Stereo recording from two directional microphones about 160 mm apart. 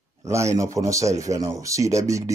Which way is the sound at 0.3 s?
20° right (ahead or behind).